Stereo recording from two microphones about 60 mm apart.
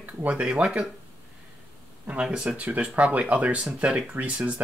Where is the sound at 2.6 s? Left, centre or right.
Right.